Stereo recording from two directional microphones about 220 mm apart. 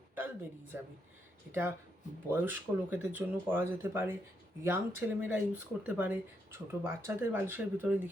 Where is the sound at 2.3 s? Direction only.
10° right (ahead or behind).